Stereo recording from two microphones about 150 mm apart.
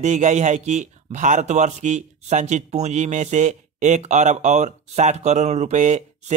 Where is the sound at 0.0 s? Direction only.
55° right (ahead or behind).